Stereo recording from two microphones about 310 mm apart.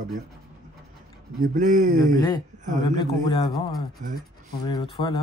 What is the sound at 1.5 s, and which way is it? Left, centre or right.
Speech, right.